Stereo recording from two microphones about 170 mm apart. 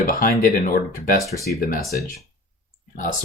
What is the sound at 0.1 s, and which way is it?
Speech, 55° left (ahead or behind).